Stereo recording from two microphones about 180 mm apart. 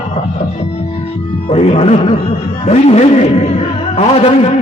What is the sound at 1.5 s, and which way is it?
A man's voice, 30° left (ahead or behind).